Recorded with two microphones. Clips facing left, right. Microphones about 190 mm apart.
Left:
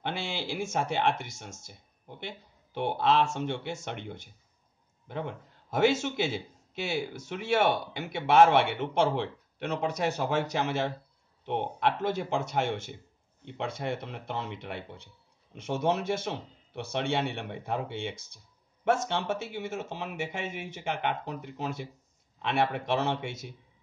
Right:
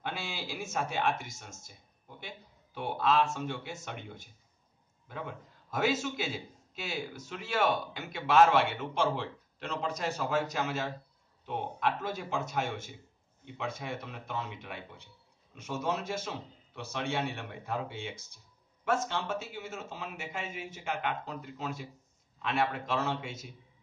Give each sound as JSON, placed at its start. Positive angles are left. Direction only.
{"t": 0.1, "sound": "speech", "side_deg": 65}
{"t": 6.0, "sound": "a man's voice", "side_deg": 65}